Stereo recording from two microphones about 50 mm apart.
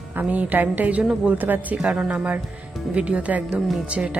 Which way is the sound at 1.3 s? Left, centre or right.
Right.